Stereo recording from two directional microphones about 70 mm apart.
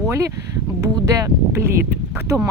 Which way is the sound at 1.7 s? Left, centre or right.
Right.